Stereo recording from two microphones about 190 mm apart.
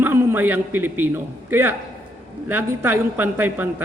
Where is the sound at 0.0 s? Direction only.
10° right (ahead or behind).